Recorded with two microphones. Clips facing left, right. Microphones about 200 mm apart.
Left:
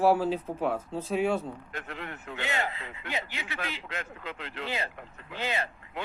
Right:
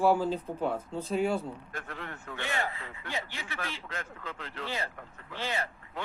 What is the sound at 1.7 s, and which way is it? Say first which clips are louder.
Speech: left 2 dB; 20° left (ahead or behind).